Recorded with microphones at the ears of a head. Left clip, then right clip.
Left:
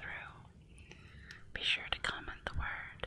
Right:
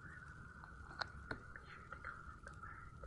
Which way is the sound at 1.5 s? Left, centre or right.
Left.